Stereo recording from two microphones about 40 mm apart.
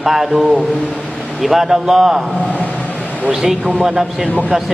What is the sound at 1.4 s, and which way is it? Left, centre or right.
Speech, centre.